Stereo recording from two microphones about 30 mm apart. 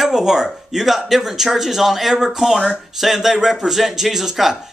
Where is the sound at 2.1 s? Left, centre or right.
Centre.